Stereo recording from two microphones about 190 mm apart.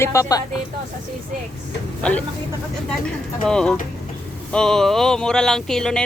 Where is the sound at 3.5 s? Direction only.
5° left (ahead or behind).